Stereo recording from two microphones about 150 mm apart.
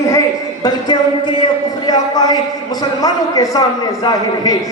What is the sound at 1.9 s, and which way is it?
A man's voice, 25° left (ahead or behind).